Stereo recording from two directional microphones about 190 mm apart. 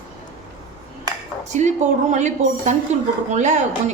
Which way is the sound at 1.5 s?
40° right (ahead or behind).